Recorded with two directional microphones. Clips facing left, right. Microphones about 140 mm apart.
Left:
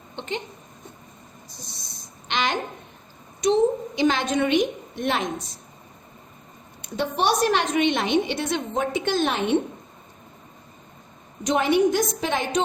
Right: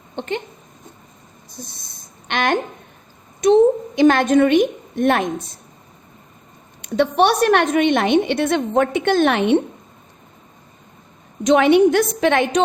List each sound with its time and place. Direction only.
0.2 s a woman's voice: 55° right (ahead or behind)
2.2 s a woman's voice: 55° right (ahead or behind)
6.8 s a woman's voice: 65° right (ahead or behind)
11.4 s a woman's voice: 80° right